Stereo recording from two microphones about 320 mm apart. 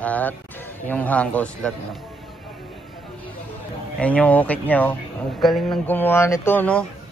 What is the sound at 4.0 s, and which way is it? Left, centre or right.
A man's voice, centre.